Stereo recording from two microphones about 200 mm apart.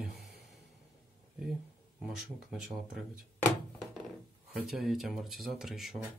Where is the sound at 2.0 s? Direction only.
Centre (ahead or behind).